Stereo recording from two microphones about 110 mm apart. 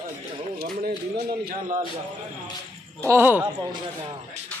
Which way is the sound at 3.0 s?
20° right (ahead or behind).